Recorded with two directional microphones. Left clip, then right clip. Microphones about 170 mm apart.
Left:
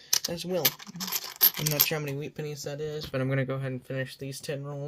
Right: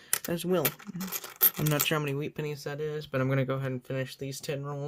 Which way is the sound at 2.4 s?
15° right (ahead or behind).